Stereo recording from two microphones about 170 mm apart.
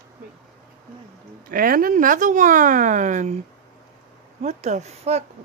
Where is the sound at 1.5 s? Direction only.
55° right (ahead or behind).